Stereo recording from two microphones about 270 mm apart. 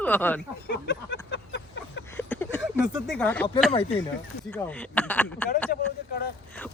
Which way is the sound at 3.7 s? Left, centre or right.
Left.